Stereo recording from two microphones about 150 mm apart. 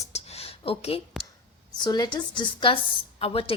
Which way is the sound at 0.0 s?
45° left (ahead or behind).